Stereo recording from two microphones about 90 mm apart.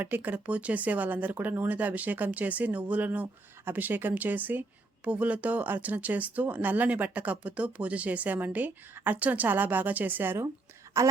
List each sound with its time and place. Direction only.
0.0 s speech: 20° right (ahead or behind)
11.0 s speech: 35° right (ahead or behind)